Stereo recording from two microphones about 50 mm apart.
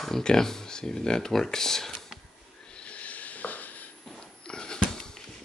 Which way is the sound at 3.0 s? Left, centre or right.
Left.